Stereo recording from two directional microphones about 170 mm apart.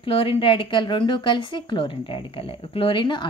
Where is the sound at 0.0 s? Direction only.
35° left (ahead or behind).